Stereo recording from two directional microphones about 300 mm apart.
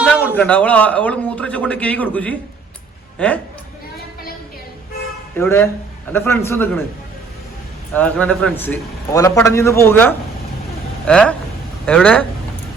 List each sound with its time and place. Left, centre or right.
0.0 s a man's voice: centre
5.4 s a man's voice: centre
7.9 s a man's voice: centre